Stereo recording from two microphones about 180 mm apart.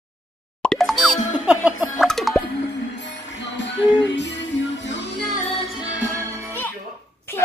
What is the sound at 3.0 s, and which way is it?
Music, 85° left.